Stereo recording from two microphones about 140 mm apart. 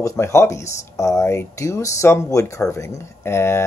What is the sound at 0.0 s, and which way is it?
Speech, 20° left (ahead or behind).